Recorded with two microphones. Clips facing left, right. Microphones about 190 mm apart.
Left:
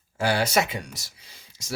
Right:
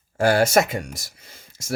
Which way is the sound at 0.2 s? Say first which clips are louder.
Right 6 dB; 45° right (ahead or behind).